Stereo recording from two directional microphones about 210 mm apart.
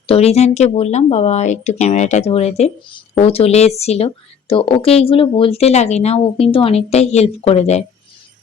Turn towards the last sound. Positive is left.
turn(degrees=30)  # may be behind; listen again after turning